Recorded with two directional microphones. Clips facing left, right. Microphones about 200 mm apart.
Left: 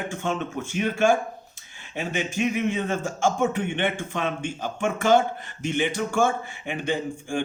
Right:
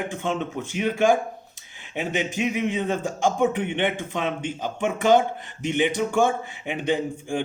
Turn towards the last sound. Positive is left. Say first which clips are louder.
# right 2 dB
turn(degrees=-20)  # may be behind; listen again after turning